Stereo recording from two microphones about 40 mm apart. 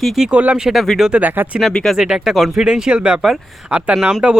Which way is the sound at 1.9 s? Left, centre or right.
Centre.